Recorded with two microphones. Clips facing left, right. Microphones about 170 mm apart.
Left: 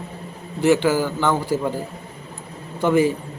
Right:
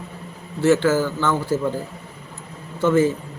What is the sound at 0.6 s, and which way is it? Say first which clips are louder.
A man's voice: even; 15° left (ahead or behind).